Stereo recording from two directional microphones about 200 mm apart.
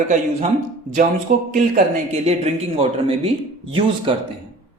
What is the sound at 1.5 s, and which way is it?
Speech, 40° right (ahead or behind).